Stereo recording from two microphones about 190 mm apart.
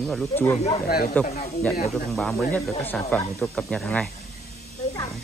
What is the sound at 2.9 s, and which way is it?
Speech, 10° left (ahead or behind).